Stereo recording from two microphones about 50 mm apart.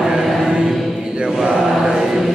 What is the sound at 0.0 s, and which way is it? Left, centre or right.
Chant, centre.